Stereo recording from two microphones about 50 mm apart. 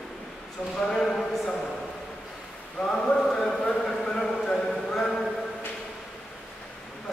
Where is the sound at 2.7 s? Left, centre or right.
Centre.